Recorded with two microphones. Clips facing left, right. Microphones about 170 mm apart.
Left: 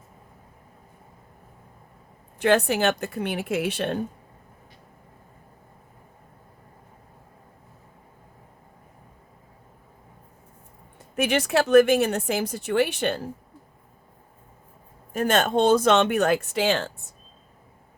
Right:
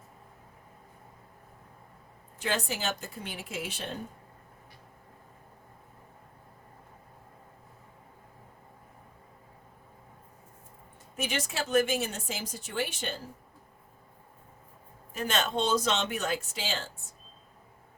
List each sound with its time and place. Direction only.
2.4 s a woman's voice: 65° left (ahead or behind)
11.2 s a woman's voice: 65° left (ahead or behind)
15.1 s a woman's voice: 50° left (ahead or behind)